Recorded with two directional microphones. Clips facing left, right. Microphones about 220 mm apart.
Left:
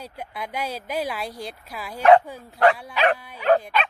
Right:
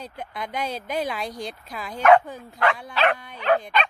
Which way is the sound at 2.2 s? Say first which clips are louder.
Left 5 dB; 10° left (ahead or behind).